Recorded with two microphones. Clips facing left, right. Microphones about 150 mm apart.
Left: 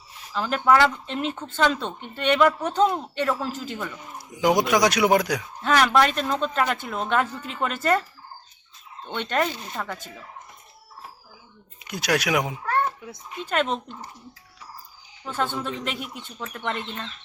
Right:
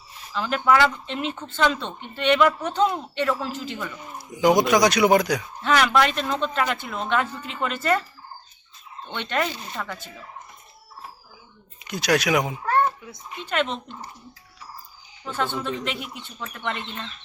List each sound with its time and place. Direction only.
0.3 s speech: 40° left (ahead or behind)
4.4 s speech: 5° left (ahead or behind)
5.6 s speech: 40° left (ahead or behind)
9.0 s speech: 40° left (ahead or behind)
11.9 s speech: 5° left (ahead or behind)
13.4 s speech: 40° left (ahead or behind)
15.3 s speech: 45° left (ahead or behind)